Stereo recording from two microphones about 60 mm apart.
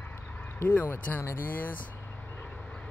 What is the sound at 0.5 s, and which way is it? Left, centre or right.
Speech, left.